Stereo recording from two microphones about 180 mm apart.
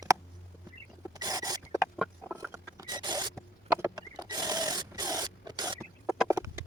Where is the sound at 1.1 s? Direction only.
20° right (ahead or behind).